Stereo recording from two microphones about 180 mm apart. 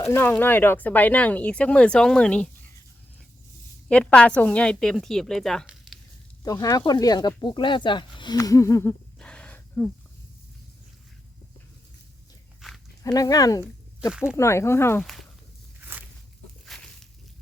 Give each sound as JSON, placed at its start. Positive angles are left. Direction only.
{"t": 0.0, "sound": "speech", "side_deg": 15}
{"t": 3.8, "sound": "a woman's voice", "side_deg": 5}
{"t": 6.4, "sound": "speech", "side_deg": 20}
{"t": 13.0, "sound": "speech", "side_deg": 20}
{"t": 14.1, "sound": "a woman's voice", "side_deg": -5}
{"t": 14.3, "sound": "speech", "side_deg": 15}
{"t": 15.0, "sound": "speech", "side_deg": 0}
{"t": 16.6, "sound": "a sound", "side_deg": 5}